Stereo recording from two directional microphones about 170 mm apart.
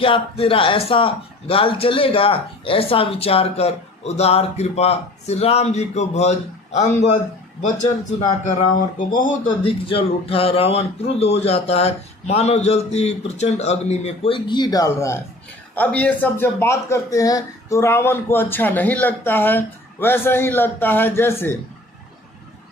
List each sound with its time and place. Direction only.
0.0 s speech: 30° left (ahead or behind)
8.7 s speech: 50° left (ahead or behind)
9.6 s speech: 35° left (ahead or behind); by 21.6 s 15° left (ahead or behind)